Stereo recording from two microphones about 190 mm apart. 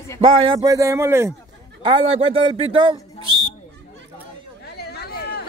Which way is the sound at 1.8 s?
25° right (ahead or behind).